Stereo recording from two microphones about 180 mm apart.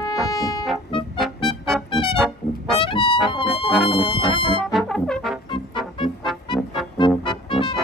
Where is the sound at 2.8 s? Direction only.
30° left (ahead or behind).